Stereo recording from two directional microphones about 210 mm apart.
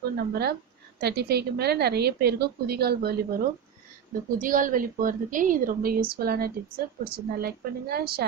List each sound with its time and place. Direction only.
0.0 s a woman's voice: 50° right (ahead or behind)